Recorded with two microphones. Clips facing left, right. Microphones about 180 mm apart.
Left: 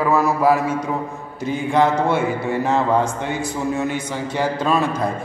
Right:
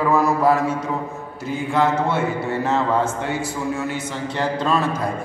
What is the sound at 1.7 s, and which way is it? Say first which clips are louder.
A man's voice: left 2 dB; 10° left (ahead or behind).